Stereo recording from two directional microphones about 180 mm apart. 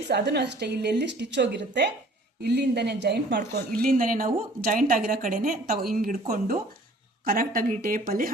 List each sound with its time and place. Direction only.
0.1 s a woman's voice: 65° right (ahead or behind)
3.9 s a woman's voice: 50° right (ahead or behind)